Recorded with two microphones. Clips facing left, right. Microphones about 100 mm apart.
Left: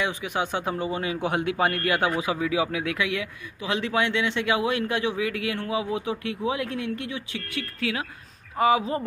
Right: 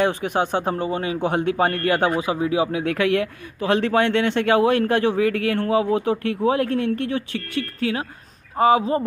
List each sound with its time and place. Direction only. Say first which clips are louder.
0.0 s speech: right 7 dB; 45° right (ahead or behind)